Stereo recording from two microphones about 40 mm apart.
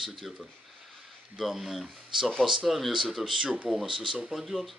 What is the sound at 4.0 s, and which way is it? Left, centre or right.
Speech, centre.